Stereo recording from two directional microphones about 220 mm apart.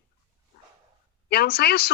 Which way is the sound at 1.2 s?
45° left (ahead or behind).